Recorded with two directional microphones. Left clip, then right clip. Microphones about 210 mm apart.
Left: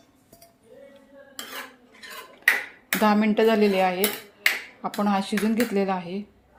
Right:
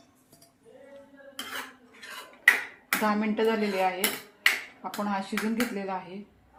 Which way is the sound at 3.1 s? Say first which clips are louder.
Left 8 dB; 45° left (ahead or behind).